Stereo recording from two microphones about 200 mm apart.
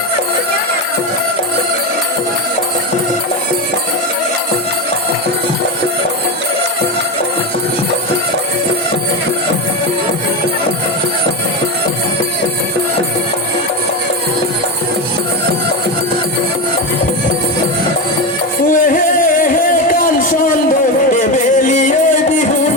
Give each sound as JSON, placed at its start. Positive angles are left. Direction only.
{"t": 21.1, "sound": "music", "side_deg": 40}